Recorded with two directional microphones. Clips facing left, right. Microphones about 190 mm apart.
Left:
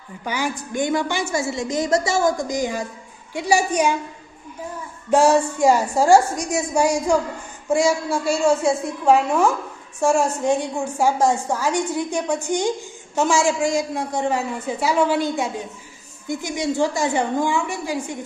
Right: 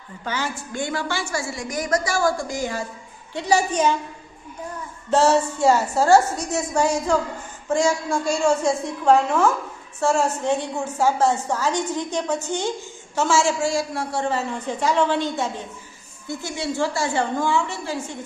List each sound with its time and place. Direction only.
0.3 s a woman's voice: 15° left (ahead or behind)
5.1 s a woman's voice: 10° left (ahead or behind)